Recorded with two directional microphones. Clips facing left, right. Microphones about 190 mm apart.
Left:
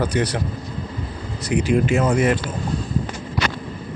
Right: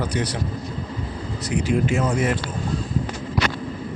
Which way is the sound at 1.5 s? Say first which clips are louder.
Left 3 dB; 80° left.